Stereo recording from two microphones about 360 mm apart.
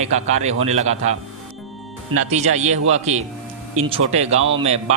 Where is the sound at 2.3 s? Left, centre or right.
Centre.